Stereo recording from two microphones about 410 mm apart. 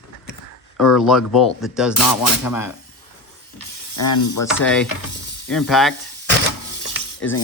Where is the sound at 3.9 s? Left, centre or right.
Left.